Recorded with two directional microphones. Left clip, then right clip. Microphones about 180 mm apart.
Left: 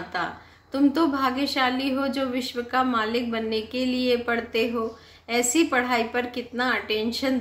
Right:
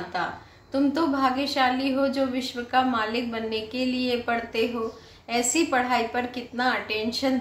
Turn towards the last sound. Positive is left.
turn(degrees=25)  # may be behind; listen again after turning